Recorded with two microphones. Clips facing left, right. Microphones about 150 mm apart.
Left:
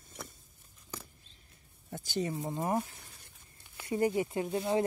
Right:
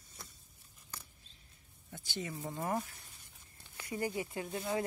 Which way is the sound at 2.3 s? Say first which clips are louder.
Left 2 dB; 20° left (ahead or behind).